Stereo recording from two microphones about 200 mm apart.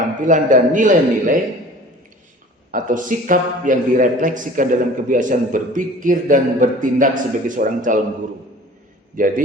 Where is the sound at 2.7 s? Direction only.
40° right (ahead or behind).